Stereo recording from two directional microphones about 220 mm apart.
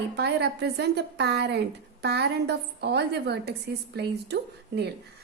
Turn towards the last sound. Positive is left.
turn(degrees=-50)  # may be behind; listen again after turning